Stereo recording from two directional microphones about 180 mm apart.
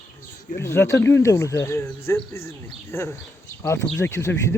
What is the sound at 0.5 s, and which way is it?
Speech, 15° left (ahead or behind).